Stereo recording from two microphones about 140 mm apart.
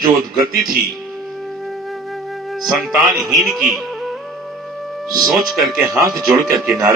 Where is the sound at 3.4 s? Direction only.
Centre (ahead or behind).